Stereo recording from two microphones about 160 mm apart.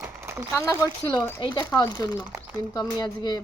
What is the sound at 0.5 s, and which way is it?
A woman's voice, 20° left (ahead or behind).